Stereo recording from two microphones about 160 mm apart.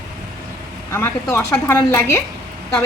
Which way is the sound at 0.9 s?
15° left (ahead or behind).